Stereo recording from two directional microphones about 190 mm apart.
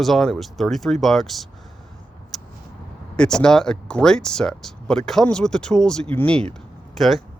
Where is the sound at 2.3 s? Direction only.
Centre (ahead or behind).